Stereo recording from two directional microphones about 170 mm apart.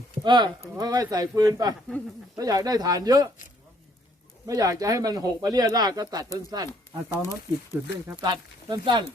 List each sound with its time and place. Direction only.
0.3 s speech: 25° right (ahead or behind)
2.0 s speech: 10° left (ahead or behind)
2.3 s speech: 20° right (ahead or behind)
4.4 s speech: 20° right (ahead or behind)
6.7 s speech: 15° left (ahead or behind)
7.8 s speech: 15° right (ahead or behind)
8.2 s speech: 25° right (ahead or behind)